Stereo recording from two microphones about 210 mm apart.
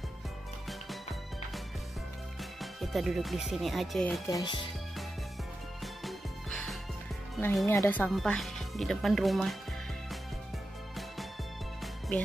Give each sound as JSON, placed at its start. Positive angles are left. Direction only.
{"t": 2.6, "sound": "speech", "side_deg": 0}
{"t": 4.3, "sound": "speech", "side_deg": 20}
{"t": 6.0, "sound": "music", "side_deg": 0}
{"t": 7.3, "sound": "speech", "side_deg": 10}